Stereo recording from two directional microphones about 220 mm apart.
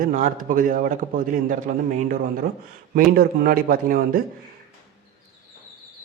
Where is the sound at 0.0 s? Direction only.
35° right (ahead or behind).